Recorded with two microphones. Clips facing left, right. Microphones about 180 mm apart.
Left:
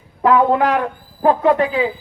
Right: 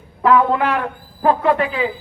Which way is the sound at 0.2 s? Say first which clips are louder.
Left 1 dB; 25° left (ahead or behind).